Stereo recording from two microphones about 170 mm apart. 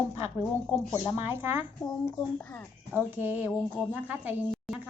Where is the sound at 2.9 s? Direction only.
10° right (ahead or behind).